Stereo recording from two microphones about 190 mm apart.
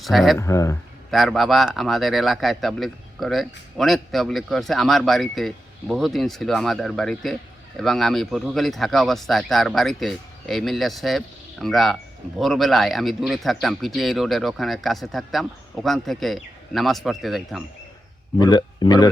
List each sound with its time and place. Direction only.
0.0 s a man's voice: centre (ahead or behind)
0.3 s speech: 15° left (ahead or behind)
1.1 s a man's voice: centre (ahead or behind)
18.3 s a man's voice: 20° left (ahead or behind)